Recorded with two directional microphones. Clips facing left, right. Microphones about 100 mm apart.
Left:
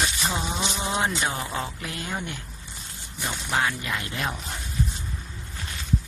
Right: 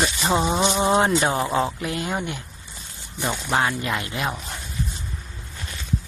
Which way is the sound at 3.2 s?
35° right (ahead or behind).